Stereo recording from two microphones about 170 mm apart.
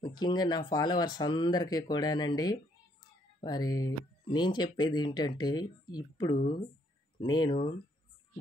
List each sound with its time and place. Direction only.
0.0 s speech: 25° left (ahead or behind)